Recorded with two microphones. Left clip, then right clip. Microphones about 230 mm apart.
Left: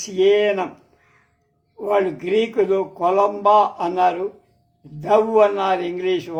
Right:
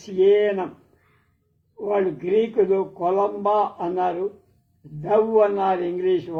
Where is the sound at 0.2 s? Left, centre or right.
Left.